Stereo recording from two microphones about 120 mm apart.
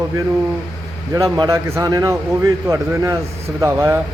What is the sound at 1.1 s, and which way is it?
Speech, 30° right (ahead or behind).